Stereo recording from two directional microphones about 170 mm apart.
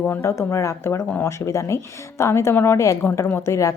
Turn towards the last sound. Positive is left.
turn(degrees=15)  # may be behind; listen again after turning